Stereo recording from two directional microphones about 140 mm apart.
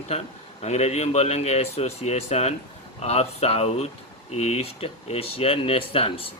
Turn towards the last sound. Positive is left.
turn(degrees=40)  # may be behind; listen again after turning